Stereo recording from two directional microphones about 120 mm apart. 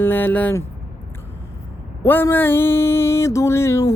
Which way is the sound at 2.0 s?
15° left (ahead or behind).